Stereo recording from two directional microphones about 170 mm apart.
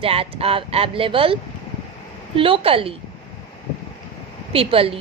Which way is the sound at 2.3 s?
30° right (ahead or behind).